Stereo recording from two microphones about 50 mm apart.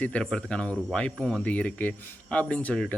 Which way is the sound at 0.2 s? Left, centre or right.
Centre.